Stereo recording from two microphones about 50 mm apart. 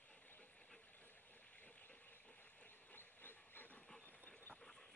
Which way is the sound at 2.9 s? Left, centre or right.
Left.